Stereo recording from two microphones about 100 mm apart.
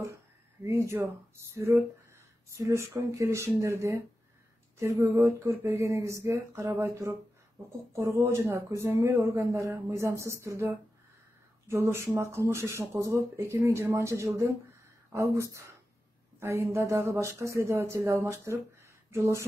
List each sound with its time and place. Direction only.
0.7 s speech: 30° right (ahead or behind)